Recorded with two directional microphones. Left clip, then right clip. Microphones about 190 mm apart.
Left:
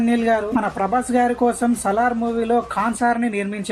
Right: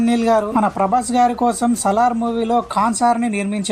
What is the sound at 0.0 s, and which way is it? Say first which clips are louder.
Speech: right 3 dB; 45° right (ahead or behind).